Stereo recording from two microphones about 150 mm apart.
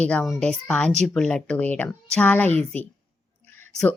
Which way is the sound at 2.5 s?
45° right (ahead or behind).